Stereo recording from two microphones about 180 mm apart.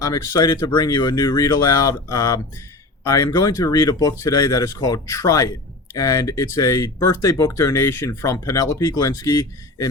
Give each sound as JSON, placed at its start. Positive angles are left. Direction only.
{"t": 0.0, "sound": "speech", "side_deg": 20}